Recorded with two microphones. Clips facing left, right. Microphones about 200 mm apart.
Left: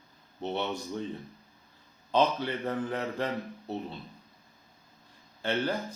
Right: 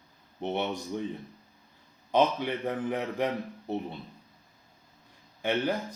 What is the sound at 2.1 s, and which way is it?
A man's voice, 15° right (ahead or behind).